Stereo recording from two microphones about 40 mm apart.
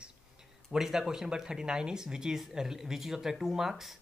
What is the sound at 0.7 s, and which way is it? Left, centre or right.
A man's voice, centre.